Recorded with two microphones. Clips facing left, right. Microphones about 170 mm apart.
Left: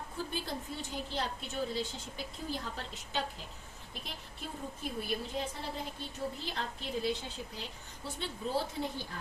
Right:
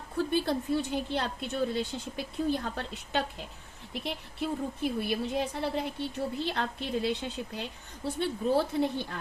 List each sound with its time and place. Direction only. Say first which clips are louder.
0.2 s a woman's voice: right 11 dB; 65° right (ahead or behind)